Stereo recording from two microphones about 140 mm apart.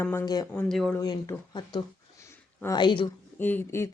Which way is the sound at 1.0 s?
25° left (ahead or behind).